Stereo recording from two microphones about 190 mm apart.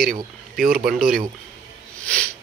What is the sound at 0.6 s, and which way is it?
Speech, 50° right (ahead or behind).